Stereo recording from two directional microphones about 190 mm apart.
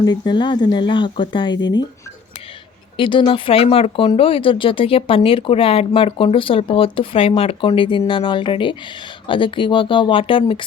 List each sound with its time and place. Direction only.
0.0 s speech: 20° left (ahead or behind)
3.0 s speech: 25° left (ahead or behind)